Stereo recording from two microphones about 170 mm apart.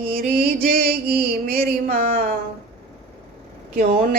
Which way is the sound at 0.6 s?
60° right (ahead or behind).